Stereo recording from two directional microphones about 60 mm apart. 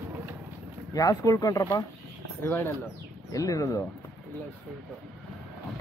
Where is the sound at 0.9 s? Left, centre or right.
Left.